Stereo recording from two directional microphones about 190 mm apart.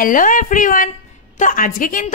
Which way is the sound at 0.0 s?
45° left (ahead or behind).